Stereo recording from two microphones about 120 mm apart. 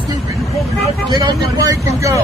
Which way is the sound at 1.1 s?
30° right (ahead or behind).